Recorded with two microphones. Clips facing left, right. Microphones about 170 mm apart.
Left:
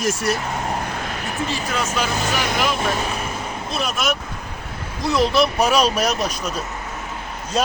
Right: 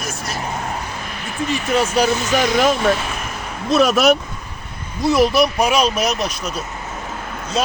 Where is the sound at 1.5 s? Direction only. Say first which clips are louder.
Right 4 dB; 20° right (ahead or behind).